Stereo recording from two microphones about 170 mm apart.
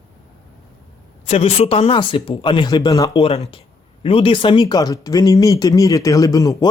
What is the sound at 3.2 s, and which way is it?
Speech, 35° left (ahead or behind).